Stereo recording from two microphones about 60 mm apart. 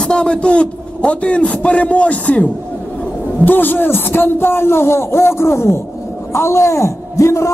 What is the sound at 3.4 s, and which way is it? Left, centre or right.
A man's voice, left.